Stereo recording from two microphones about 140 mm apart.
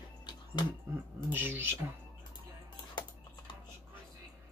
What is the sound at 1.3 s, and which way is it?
Speech, 15° right (ahead or behind).